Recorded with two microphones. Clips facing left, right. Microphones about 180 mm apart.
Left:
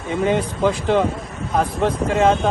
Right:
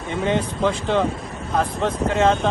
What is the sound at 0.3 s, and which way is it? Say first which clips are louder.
Speech: left 1 dB; 5° left (ahead or behind).